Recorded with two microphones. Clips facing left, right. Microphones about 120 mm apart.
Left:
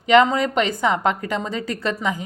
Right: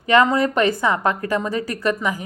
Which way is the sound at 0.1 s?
20° left (ahead or behind).